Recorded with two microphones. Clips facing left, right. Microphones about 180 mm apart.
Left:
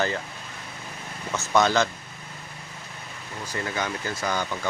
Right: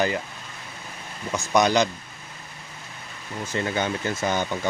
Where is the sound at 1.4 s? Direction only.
15° right (ahead or behind).